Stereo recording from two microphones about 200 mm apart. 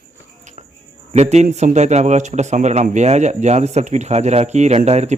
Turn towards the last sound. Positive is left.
turn(degrees=-35)  # may be behind; listen again after turning